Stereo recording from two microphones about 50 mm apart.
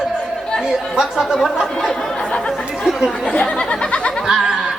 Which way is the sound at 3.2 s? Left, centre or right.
Centre.